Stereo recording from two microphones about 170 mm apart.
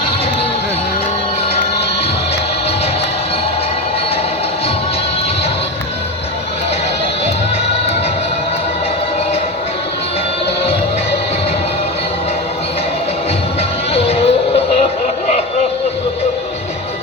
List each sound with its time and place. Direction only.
13.9 s music: 35° left (ahead or behind)